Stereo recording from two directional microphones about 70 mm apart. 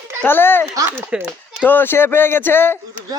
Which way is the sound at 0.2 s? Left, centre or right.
Left.